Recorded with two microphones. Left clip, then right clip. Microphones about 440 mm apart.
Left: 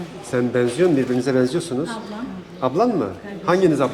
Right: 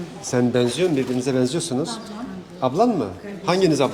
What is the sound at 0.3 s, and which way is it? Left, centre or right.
A man's voice, right.